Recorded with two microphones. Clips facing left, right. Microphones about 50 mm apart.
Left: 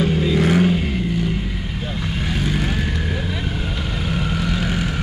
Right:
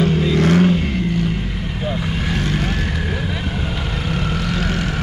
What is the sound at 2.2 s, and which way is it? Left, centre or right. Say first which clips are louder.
Vehicle: even; centre.